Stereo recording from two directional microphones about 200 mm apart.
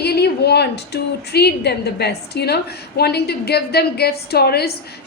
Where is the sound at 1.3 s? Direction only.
55° left (ahead or behind).